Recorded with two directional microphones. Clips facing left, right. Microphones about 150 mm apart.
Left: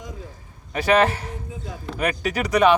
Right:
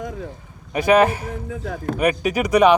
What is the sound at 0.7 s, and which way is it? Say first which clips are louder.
Speech: right 3 dB; 10° right (ahead or behind).